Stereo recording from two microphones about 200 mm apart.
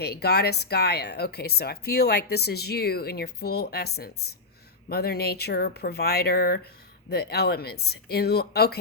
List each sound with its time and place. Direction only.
0.0 s speech: 55° left (ahead or behind)